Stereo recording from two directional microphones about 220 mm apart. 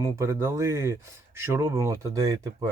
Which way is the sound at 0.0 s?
15° right (ahead or behind).